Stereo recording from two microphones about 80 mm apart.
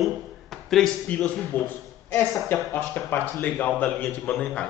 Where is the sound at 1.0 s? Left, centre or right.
Centre.